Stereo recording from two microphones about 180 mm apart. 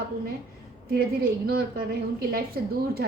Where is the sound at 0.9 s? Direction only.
55° right (ahead or behind).